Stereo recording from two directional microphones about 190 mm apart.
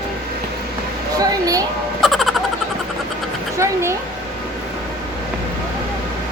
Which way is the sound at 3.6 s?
15° right (ahead or behind).